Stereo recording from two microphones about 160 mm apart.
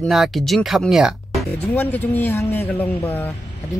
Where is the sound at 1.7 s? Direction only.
10° left (ahead or behind).